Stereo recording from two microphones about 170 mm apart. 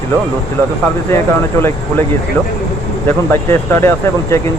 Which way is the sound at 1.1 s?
15° left (ahead or behind).